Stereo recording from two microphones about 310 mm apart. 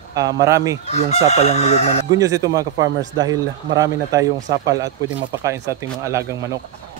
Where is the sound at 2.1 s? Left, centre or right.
Centre.